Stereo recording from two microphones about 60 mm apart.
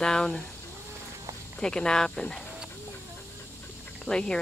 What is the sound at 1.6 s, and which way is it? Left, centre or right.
Speech, centre.